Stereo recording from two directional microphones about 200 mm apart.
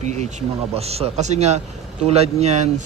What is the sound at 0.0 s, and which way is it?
Speech, 35° right (ahead or behind).